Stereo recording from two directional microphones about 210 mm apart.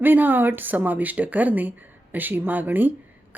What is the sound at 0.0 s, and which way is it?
Speech, 10° right (ahead or behind).